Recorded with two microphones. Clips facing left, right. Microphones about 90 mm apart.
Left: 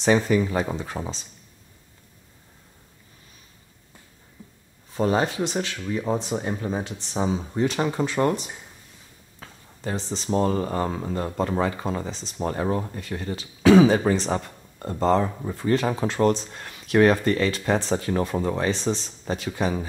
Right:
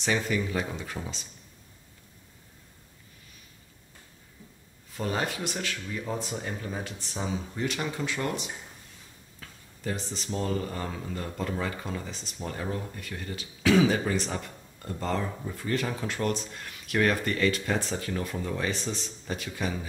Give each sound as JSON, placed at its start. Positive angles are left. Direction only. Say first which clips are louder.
{"t": 0.0, "sound": "speech", "louder": "left 8 dB", "side_deg": 35}
{"t": 4.4, "sound": "a sound", "louder": "left 5 dB", "side_deg": 25}
{"t": 4.9, "sound": "speech", "louder": "left 8 dB", "side_deg": 30}